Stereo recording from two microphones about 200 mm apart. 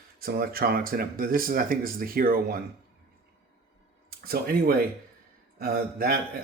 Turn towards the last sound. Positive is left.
turn(degrees=-45)  # may be behind; listen again after turning